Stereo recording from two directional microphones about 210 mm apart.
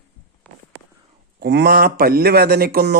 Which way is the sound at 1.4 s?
55° right (ahead or behind).